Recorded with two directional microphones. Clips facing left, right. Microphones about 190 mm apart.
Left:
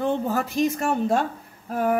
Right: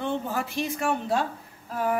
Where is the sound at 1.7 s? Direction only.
50° left (ahead or behind).